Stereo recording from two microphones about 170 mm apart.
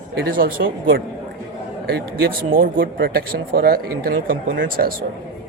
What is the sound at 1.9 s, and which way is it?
Speech, 75° right (ahead or behind).